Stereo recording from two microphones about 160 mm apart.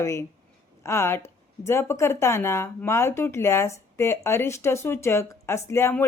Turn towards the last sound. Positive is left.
turn(degrees=15)  # may be behind; listen again after turning